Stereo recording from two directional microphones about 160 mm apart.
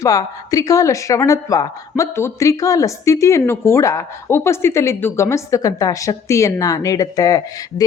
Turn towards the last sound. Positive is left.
turn(degrees=20)  # may be behind; listen again after turning